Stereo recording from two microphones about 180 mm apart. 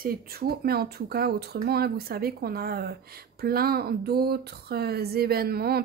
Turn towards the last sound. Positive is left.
turn(degrees=-60)  # may be behind; listen again after turning